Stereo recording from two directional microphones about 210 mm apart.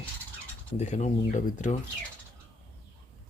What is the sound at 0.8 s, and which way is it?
Speech, 35° left (ahead or behind).